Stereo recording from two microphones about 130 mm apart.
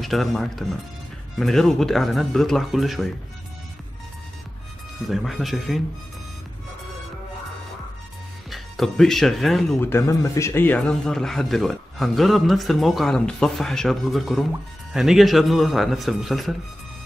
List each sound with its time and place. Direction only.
0.0 s speech: centre (ahead or behind)
5.1 s speech: centre (ahead or behind)
8.5 s speech: centre (ahead or behind)
9.8 s speech: 20° left (ahead or behind)
11.1 s speech: 5° left (ahead or behind)